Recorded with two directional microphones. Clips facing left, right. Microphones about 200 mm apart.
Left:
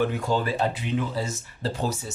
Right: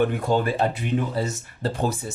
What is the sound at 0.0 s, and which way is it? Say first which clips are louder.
Speech: right 3 dB; 55° right (ahead or behind).